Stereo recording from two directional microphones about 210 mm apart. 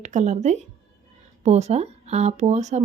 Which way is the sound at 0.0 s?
35° right (ahead or behind).